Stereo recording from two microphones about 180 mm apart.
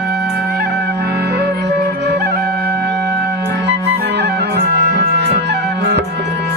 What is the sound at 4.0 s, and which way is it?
Music, 70° right (ahead or behind).